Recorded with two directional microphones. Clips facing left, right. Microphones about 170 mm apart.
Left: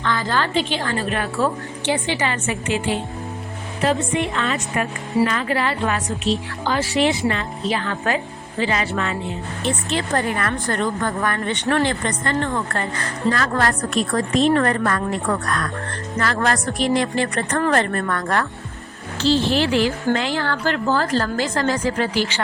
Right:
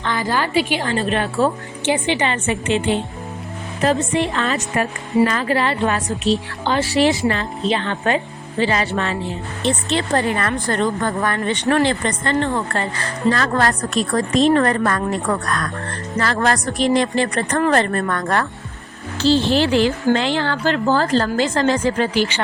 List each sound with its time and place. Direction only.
0.0 s a woman's voice: 15° right (ahead or behind)
3.8 s a woman's voice: 35° right (ahead or behind)
7.6 s a woman's voice: 25° right (ahead or behind)